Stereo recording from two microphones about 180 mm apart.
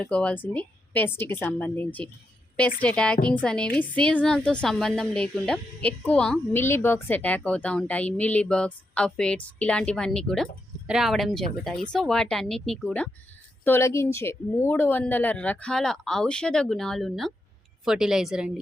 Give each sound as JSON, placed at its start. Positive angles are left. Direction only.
{"t": 0.0, "sound": "a woman's voice", "side_deg": 5}